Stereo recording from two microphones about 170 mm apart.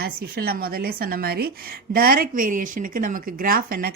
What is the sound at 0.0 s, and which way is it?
A woman's voice, 60° right (ahead or behind).